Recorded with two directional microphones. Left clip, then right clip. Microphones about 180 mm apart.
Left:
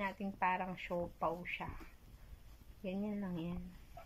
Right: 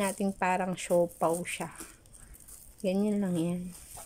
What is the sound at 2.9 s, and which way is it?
Speech, 90° right.